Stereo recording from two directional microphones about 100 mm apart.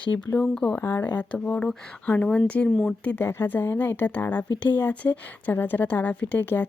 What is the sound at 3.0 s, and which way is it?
A woman's voice, 20° left (ahead or behind).